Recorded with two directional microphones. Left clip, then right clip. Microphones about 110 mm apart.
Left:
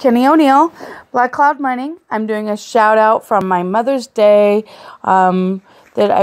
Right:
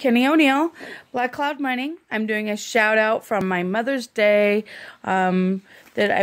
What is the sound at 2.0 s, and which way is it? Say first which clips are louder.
Speech: left 7 dB; 15° right (ahead or behind).